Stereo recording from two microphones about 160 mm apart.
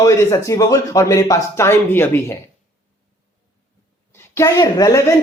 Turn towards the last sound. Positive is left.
turn(degrees=20)  # may be behind; listen again after turning